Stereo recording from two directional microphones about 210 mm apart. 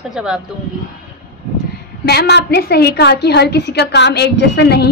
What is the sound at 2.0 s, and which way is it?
A woman's voice, 50° left (ahead or behind).